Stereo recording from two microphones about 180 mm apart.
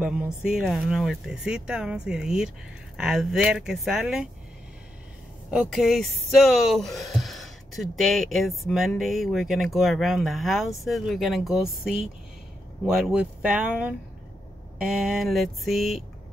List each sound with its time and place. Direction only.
0.0 s speech: 5° right (ahead or behind)
5.5 s speech: centre (ahead or behind)